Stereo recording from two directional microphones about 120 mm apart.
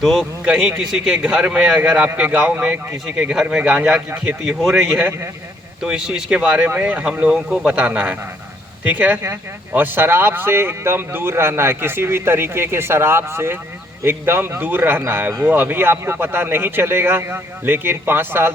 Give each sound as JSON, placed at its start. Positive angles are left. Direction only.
{"t": 0.0, "sound": "a man's voice", "side_deg": 0}
{"t": 5.8, "sound": "a man's voice", "side_deg": -5}